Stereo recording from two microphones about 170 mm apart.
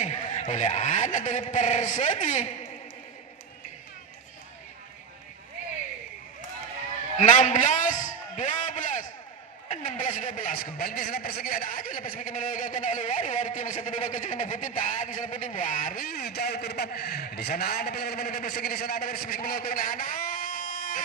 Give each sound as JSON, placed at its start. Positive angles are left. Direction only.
{"t": 0.0, "sound": "a man's voice", "side_deg": 45}
{"t": 7.2, "sound": "a sound", "side_deg": 45}
{"t": 9.7, "sound": "a man's voice", "side_deg": 50}